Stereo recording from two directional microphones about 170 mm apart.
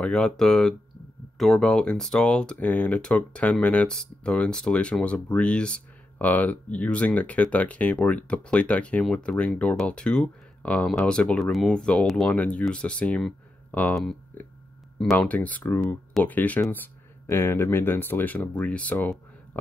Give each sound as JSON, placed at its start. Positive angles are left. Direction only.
{"t": 0.0, "sound": "speech", "side_deg": 5}